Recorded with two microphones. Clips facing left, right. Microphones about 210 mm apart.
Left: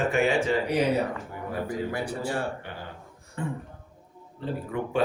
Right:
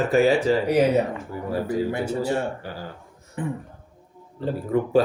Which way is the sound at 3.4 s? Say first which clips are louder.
Right 4 dB; 15° right (ahead or behind).